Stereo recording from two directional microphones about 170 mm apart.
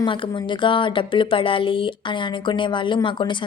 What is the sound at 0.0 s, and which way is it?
A woman's voice, 30° left (ahead or behind).